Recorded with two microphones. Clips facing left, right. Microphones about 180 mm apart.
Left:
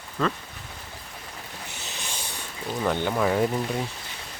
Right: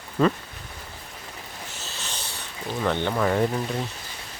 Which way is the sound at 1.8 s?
15° left (ahead or behind).